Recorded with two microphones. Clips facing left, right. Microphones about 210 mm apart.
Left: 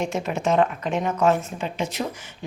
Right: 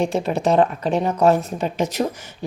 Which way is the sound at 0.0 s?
35° right (ahead or behind).